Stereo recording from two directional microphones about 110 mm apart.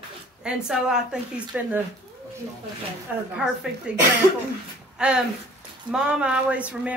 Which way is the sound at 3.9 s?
10° right (ahead or behind).